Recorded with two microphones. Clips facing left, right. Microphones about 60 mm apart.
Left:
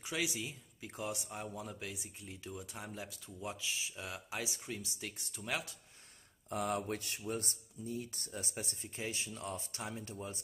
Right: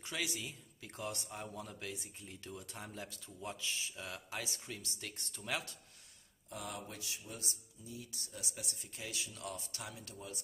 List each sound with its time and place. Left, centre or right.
0.0 s speech: centre
6.5 s speech: left